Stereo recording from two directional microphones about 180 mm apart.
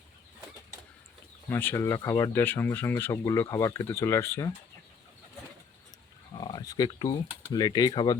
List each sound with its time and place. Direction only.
1.5 s speech: 10° left (ahead or behind)
6.4 s a sound: 20° left (ahead or behind)
7.5 s speech: 20° left (ahead or behind)